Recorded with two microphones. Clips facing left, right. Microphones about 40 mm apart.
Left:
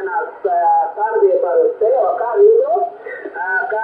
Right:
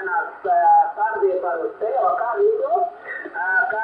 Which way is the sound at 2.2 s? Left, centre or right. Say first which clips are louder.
Left 8 dB; centre.